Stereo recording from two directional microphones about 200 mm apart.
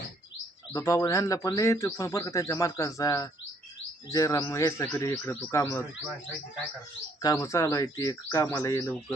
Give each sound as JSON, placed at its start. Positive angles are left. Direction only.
{"t": 0.7, "sound": "speech", "side_deg": 15}
{"t": 7.2, "sound": "speech", "side_deg": 15}